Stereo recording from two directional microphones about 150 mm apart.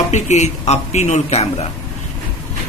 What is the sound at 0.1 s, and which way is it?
Speech, 50° left (ahead or behind).